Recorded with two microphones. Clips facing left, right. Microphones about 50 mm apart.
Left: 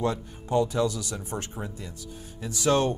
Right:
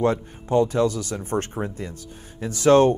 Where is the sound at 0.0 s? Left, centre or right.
Right.